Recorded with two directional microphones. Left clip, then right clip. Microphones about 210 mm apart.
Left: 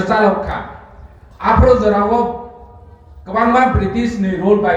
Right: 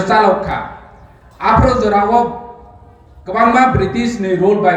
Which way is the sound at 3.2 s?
55° right (ahead or behind).